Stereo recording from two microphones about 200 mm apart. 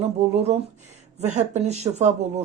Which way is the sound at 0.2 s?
30° right (ahead or behind).